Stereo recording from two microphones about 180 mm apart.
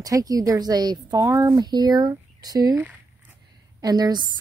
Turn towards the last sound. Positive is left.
turn(degrees=-25)  # may be behind; listen again after turning